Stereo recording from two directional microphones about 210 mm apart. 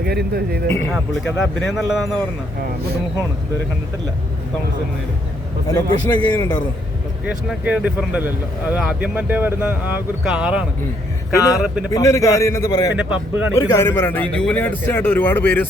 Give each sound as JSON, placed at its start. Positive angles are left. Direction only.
{"t": 0.0, "sound": "speech", "side_deg": -50}
{"t": 0.7, "sound": "a man's voice", "side_deg": 10}
{"t": 0.9, "sound": "speech", "side_deg": 0}
{"t": 5.6, "sound": "a man's voice", "side_deg": 20}
{"t": 7.3, "sound": "speech", "side_deg": -5}
{"t": 11.3, "sound": "a man's voice", "side_deg": 15}
{"t": 11.6, "sound": "speech", "side_deg": -5}
{"t": 11.9, "sound": "a man's voice", "side_deg": 15}
{"t": 13.0, "sound": "speech", "side_deg": -5}
{"t": 13.6, "sound": "a man's voice", "side_deg": 10}